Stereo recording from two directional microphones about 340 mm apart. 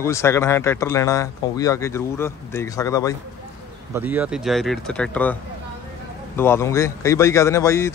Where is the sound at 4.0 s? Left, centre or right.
Centre.